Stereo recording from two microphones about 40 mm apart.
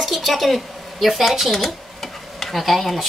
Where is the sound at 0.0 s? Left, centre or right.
Centre.